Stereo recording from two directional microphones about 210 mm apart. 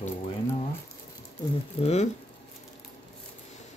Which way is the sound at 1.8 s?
30° left (ahead or behind).